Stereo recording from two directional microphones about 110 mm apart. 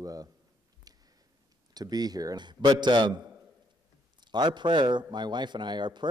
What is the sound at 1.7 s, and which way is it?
Speech, 35° right (ahead or behind).